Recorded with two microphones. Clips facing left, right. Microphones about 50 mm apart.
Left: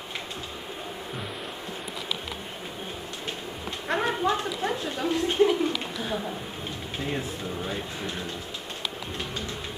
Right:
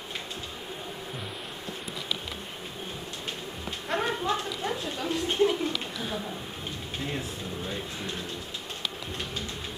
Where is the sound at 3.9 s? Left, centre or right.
Centre.